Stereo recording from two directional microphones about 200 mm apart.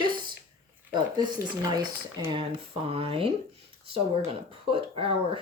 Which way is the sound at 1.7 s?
20° right (ahead or behind).